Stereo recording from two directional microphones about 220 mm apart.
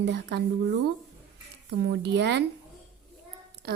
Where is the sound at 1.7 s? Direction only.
50° right (ahead or behind).